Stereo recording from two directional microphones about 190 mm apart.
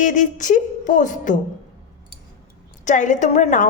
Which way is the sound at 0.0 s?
40° left (ahead or behind).